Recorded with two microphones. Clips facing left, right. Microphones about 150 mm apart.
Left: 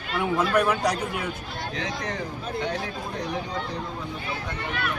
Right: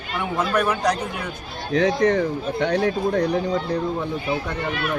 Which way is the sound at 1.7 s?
65° right (ahead or behind).